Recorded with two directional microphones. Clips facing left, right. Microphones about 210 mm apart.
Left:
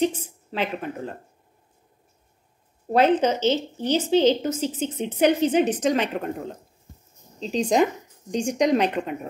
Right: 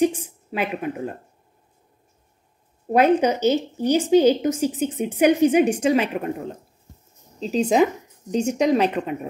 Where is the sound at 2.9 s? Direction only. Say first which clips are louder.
Right 2 dB; 10° right (ahead or behind).